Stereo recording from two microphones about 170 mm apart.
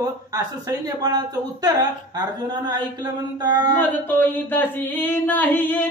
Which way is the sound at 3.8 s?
10° left (ahead or behind).